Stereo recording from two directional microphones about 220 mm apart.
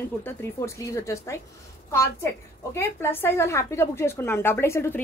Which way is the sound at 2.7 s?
10° left (ahead or behind).